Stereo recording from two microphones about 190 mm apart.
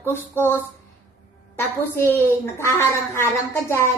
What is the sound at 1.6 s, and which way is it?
A woman's voice, 10° left (ahead or behind).